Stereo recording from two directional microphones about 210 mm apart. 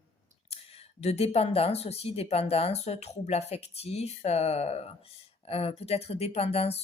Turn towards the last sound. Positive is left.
turn(degrees=30)  # may be behind; listen again after turning